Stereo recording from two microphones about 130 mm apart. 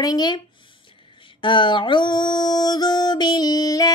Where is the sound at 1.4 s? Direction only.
40° left (ahead or behind).